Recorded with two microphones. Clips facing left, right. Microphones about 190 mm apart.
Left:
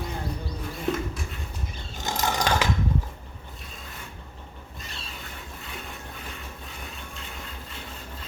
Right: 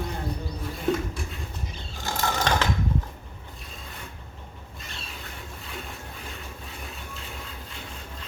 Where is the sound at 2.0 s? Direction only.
15° left (ahead or behind).